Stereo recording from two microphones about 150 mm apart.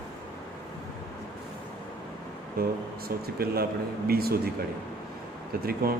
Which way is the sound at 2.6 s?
90° right.